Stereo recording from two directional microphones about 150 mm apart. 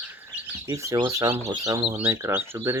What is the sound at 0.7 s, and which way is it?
Speech, 20° right (ahead or behind).